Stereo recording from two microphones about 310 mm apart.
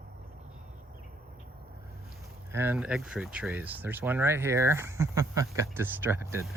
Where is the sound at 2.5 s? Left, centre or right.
Centre.